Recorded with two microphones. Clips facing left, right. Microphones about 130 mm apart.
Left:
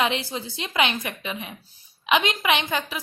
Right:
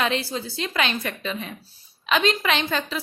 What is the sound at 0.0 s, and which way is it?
A woman's voice, 20° left (ahead or behind).